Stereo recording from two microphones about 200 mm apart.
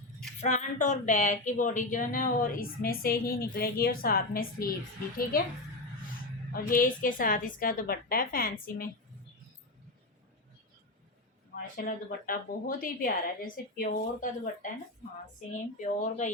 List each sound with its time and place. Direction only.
0.3 s speech: 35° left (ahead or behind)
6.5 s speech: 45° left (ahead or behind)
11.5 s speech: 45° left (ahead or behind)
15.8 s speech: 40° left (ahead or behind)